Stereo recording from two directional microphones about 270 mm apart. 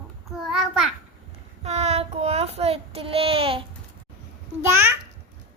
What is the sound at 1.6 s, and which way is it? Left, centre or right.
Child singing, right.